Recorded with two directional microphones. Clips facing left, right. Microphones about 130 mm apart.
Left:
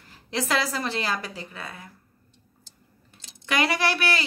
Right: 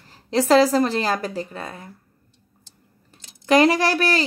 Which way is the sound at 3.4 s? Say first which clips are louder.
Right 8 dB; 35° right (ahead or behind).